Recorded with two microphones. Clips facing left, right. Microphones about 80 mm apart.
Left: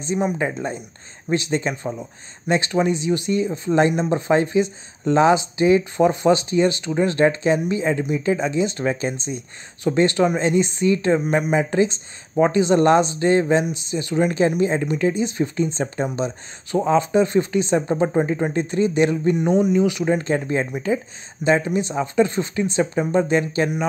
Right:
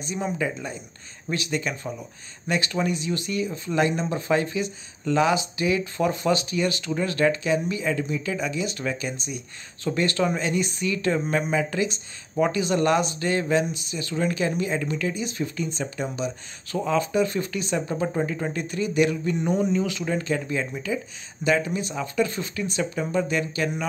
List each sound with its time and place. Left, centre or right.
0.4 s speech: left
19.3 s speech: centre
20.2 s speech: left